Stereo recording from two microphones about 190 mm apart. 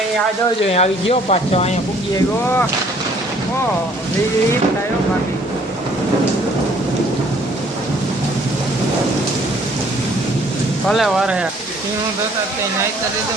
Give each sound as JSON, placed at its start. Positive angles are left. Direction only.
{"t": 0.6, "sound": "speech", "side_deg": 35}
{"t": 2.1, "sound": "speech", "side_deg": 10}
{"t": 10.8, "sound": "speech", "side_deg": 0}